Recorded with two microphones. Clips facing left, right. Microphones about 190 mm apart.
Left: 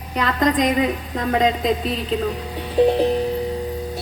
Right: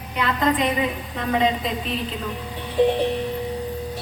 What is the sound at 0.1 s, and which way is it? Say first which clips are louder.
A woman's voice: left 2 dB; 40° left (ahead or behind).